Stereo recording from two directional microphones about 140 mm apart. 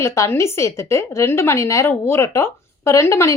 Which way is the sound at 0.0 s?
20° left (ahead or behind).